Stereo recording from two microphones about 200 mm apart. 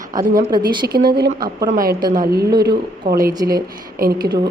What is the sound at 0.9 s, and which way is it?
A woman's voice, 50° right (ahead or behind).